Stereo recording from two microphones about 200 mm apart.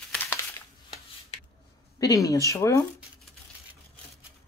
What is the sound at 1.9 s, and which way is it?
Speech, 15° left (ahead or behind).